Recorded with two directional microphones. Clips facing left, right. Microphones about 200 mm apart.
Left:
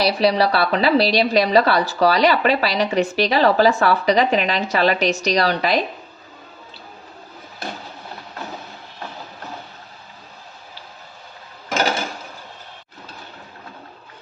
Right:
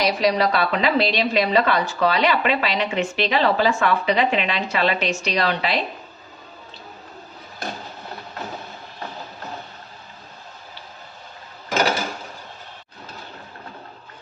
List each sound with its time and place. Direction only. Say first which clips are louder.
0.0 s a woman's voice: left 2 dB; 30° left (ahead or behind)